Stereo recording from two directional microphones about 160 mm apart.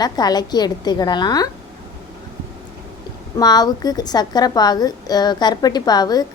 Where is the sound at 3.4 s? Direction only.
25° left (ahead or behind).